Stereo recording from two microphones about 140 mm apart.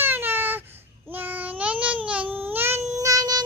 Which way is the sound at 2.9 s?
25° right (ahead or behind).